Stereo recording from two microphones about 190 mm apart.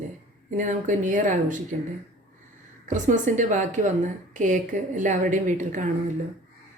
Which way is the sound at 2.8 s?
40° right (ahead or behind).